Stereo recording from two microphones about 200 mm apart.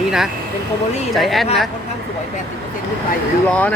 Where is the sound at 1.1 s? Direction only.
Centre (ahead or behind).